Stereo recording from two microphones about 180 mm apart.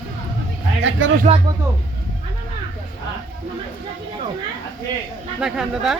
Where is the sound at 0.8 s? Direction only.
90° right.